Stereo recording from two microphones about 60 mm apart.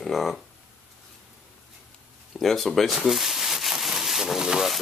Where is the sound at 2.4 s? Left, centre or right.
Centre.